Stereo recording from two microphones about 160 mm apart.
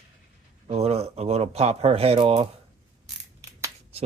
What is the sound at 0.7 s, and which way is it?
Speech, 40° right (ahead or behind).